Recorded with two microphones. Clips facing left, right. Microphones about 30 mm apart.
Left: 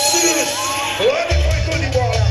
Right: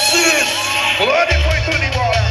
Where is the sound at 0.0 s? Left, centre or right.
Right.